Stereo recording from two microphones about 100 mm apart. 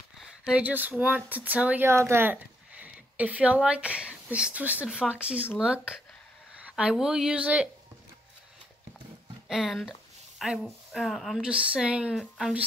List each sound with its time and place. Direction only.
0.2 s speech: 10° right (ahead or behind)
1.9 s a woman's voice: 25° right (ahead or behind)
9.5 s speech: 5° right (ahead or behind)
11.4 s speech: 10° right (ahead or behind)